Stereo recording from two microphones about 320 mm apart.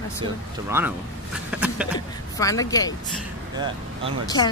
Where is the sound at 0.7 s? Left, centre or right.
Centre.